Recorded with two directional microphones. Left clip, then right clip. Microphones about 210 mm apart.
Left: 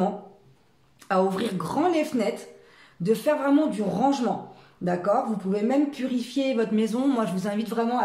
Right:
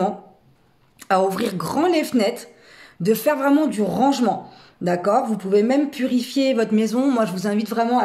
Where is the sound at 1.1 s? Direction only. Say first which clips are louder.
Right 5 dB; 35° right (ahead or behind).